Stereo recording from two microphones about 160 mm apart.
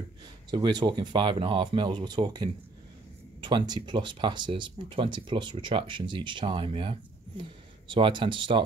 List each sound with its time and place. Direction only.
0.5 s speech: 25° right (ahead or behind)